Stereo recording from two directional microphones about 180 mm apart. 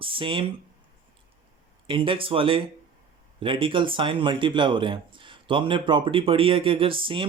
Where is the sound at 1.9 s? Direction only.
30° right (ahead or behind).